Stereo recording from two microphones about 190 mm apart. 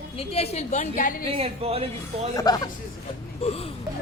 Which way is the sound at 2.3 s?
20° left (ahead or behind).